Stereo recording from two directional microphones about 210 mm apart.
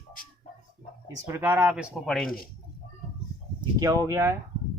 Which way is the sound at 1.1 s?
15° right (ahead or behind).